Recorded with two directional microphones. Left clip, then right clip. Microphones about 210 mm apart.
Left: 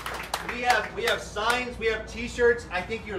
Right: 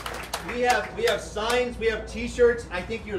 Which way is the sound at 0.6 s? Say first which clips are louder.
Right 1 dB; 25° left (ahead or behind).